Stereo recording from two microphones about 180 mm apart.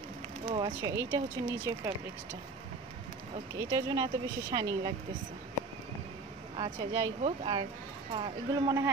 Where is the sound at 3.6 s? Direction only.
20° right (ahead or behind).